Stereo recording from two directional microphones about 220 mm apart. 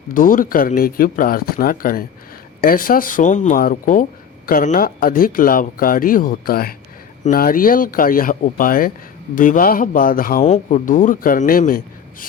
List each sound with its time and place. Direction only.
0.1 s a man's voice: 40° left (ahead or behind)